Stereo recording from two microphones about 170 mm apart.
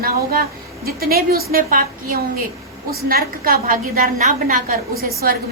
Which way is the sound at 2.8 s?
60° right (ahead or behind).